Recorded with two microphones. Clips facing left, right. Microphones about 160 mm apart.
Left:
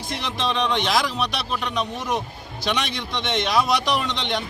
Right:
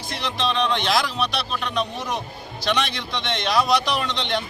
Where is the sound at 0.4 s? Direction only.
15° left (ahead or behind).